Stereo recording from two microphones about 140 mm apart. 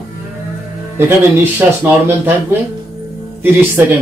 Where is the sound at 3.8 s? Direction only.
15° right (ahead or behind).